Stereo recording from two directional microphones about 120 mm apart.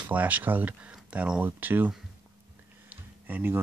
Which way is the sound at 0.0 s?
15° right (ahead or behind).